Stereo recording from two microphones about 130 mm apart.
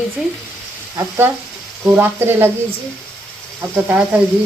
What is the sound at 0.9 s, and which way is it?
Speech, 20° right (ahead or behind).